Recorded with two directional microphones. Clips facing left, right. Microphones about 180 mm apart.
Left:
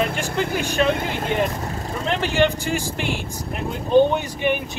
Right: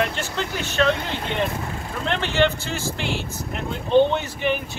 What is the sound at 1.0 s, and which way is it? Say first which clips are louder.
Speech: left 4 dB; 45° left (ahead or behind).